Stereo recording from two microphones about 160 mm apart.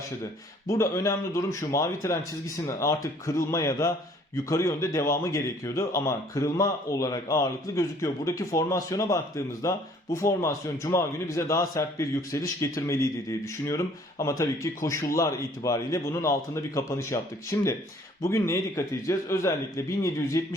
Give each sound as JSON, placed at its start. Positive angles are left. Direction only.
{"t": 0.7, "sound": "a man's voice", "side_deg": 20}